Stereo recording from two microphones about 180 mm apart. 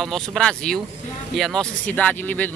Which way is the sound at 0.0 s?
5° left (ahead or behind).